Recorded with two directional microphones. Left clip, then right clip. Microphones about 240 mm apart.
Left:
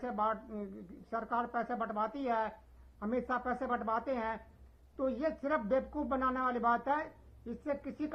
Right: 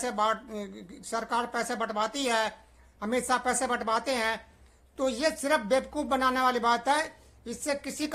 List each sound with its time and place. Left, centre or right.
0.0 s speech: right